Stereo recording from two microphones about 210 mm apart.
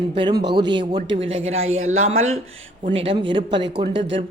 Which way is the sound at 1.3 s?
70° right (ahead or behind).